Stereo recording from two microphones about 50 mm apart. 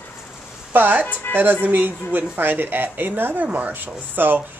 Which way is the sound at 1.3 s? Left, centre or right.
Left.